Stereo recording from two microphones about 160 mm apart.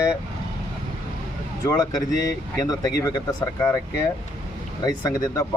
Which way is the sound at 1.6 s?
20° left (ahead or behind).